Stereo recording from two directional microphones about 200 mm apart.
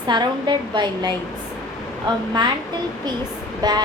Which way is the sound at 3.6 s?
20° right (ahead or behind).